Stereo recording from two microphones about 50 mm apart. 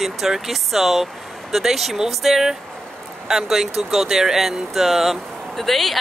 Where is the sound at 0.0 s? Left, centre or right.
Centre.